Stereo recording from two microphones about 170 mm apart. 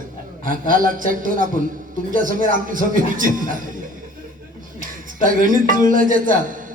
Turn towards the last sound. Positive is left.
turn(degrees=-55)  # may be behind; listen again after turning